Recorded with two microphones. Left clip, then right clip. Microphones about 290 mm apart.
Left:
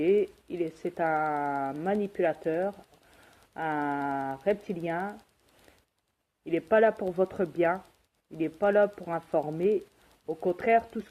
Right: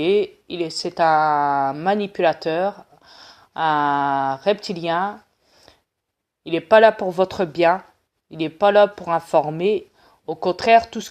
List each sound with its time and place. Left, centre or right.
0.2 s speech: right
6.6 s speech: right